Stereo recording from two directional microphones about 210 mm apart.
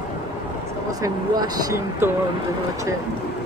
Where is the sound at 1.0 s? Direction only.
20° right (ahead or behind).